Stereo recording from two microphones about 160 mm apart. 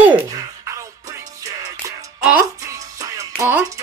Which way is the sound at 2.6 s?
20° right (ahead or behind).